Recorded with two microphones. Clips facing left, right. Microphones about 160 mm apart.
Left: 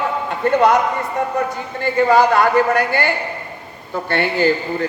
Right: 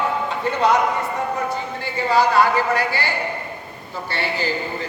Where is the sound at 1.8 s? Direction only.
50° left (ahead or behind).